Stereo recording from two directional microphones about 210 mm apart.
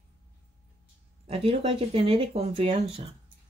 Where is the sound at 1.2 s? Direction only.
25° right (ahead or behind).